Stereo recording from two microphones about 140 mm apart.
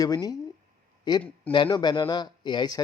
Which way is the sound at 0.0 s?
25° left (ahead or behind).